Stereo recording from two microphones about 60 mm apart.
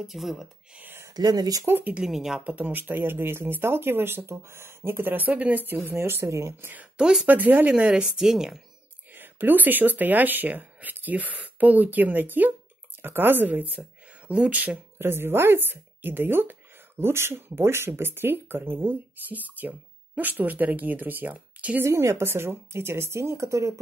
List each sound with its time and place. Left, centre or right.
0.0 s speech: centre
1.0 s speech: right
1.7 s speech: right
2.0 s speech: centre
2.4 s speech: right
5.9 s speech: right
7.0 s speech: centre
7.2 s speech: right
7.9 s speech: centre
9.1 s speech: right
15.0 s speech: right
21.8 s speech: right